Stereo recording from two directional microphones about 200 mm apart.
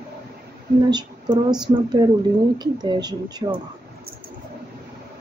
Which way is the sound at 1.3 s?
5° right (ahead or behind).